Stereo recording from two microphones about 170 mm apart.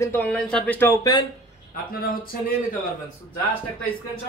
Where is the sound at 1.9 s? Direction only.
60° left (ahead or behind).